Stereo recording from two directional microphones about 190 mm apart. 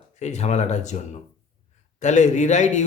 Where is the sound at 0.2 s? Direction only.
35° left (ahead or behind).